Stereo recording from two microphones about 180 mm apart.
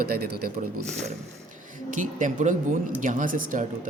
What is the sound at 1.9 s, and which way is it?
A woman's voice, 45° right (ahead or behind).